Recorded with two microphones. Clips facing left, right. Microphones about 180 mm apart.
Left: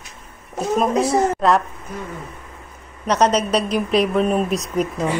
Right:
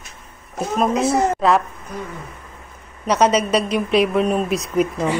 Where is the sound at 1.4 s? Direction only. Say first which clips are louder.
Right 1 dB; centre (ahead or behind).